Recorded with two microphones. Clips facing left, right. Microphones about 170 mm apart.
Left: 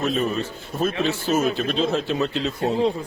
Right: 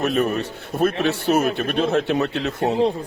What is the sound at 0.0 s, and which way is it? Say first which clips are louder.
Speech: right 2 dB; 65° right (ahead or behind).